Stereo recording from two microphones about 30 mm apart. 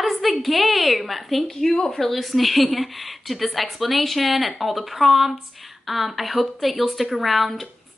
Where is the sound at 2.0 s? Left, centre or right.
Centre.